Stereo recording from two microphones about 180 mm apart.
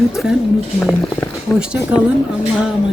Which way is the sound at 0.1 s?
Centre (ahead or behind).